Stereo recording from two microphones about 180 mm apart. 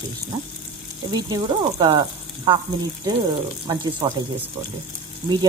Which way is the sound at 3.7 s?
25° right (ahead or behind).